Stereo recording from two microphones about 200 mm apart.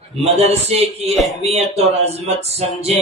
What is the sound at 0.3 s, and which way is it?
Speech, 30° right (ahead or behind).